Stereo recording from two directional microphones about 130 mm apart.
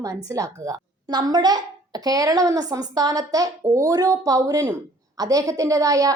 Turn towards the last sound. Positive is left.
turn(degrees=-25)  # may be behind; listen again after turning